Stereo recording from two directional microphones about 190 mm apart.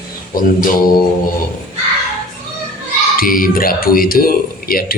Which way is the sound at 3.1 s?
50° left (ahead or behind).